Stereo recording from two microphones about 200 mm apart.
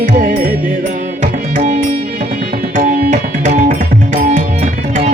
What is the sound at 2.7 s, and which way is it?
Tabla, 45° right (ahead or behind).